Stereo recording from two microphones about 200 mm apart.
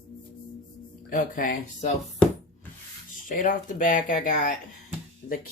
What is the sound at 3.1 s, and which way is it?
Speech, 40° left (ahead or behind).